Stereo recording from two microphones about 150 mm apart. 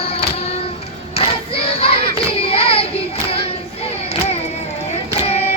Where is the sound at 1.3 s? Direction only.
40° left (ahead or behind).